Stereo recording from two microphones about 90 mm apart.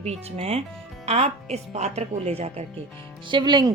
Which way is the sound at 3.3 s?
55° right (ahead or behind).